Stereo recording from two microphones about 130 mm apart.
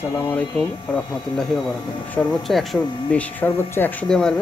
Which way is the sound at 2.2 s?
Centre (ahead or behind).